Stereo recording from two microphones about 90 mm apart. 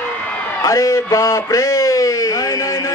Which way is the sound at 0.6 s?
35° left (ahead or behind).